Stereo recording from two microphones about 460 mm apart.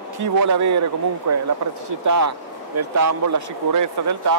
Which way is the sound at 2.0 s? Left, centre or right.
Right.